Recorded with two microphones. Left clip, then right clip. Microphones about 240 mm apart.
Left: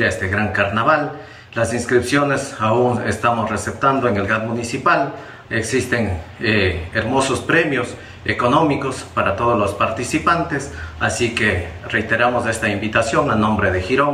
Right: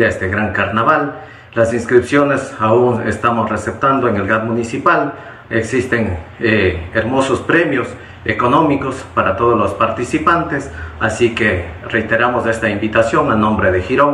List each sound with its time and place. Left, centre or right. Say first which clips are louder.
0.0 s speech: right 4 dB; centre